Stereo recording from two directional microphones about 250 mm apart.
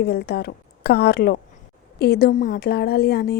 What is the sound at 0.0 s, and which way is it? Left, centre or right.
A woman's voice, left.